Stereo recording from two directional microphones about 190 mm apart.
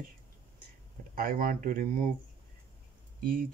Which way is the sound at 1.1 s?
45° right (ahead or behind).